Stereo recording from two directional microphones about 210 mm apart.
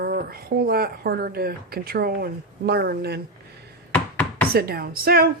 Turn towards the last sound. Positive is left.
turn(degrees=-45)  # may be behind; listen again after turning